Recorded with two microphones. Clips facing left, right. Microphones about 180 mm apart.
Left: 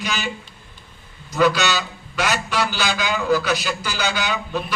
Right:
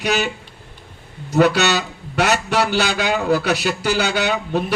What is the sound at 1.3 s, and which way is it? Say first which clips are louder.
A man's voice: right 3 dB; 60° right (ahead or behind).